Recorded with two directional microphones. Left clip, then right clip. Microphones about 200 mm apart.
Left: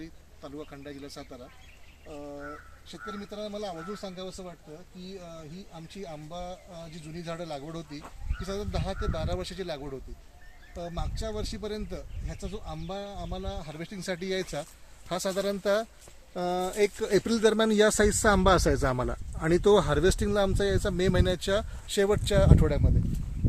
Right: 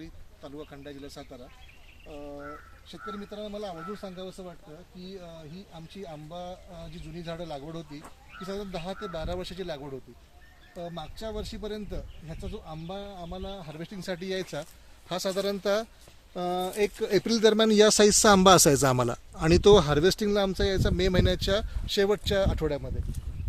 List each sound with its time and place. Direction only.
0.0 s a man's voice: 10° right (ahead or behind)
5.7 s a man's voice: 5° right (ahead or behind)